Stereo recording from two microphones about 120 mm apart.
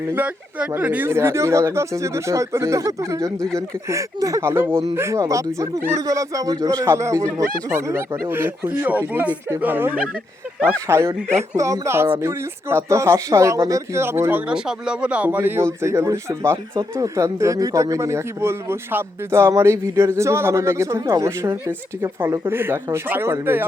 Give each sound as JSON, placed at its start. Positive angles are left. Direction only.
{"t": 0.1, "sound": "speech", "side_deg": -15}
{"t": 3.3, "sound": "speech", "side_deg": 5}
{"t": 3.8, "sound": "speech", "side_deg": -25}